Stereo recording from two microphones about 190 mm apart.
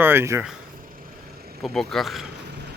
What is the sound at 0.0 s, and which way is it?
Speech, 10° right (ahead or behind).